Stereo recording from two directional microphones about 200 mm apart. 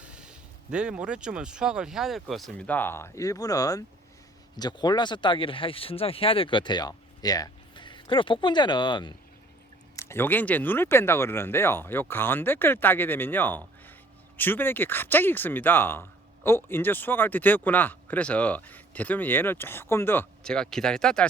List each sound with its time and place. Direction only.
0.0 s speech: 5° right (ahead or behind)